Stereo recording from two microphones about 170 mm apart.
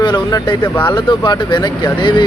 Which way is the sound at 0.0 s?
25° left (ahead or behind).